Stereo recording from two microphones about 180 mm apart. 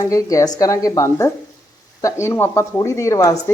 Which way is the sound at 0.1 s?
20° left (ahead or behind).